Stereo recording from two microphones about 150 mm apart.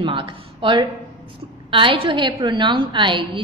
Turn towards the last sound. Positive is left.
turn(degrees=-30)  # may be behind; listen again after turning